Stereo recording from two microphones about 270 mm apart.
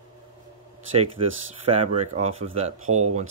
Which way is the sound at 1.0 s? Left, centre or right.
Right.